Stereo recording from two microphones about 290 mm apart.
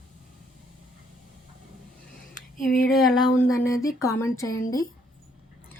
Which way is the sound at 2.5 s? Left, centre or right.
Left.